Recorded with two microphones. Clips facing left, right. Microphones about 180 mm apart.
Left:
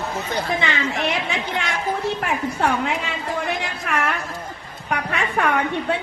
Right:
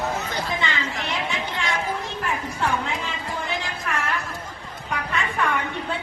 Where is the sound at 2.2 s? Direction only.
65° left (ahead or behind).